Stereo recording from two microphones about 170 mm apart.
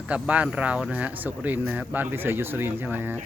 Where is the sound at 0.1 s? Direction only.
10° right (ahead or behind).